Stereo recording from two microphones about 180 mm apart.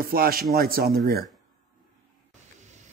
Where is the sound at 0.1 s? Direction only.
55° right (ahead or behind).